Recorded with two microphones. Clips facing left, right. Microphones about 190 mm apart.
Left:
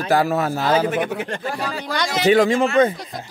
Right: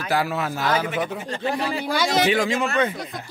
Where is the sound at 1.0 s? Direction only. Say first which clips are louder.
Left 4 dB; 65° left (ahead or behind).